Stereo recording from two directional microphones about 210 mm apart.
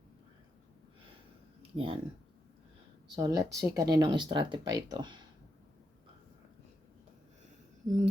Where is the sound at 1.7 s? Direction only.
25° right (ahead or behind).